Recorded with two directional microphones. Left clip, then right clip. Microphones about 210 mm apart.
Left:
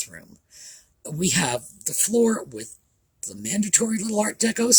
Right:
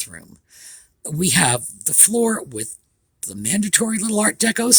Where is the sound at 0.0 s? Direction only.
35° right (ahead or behind).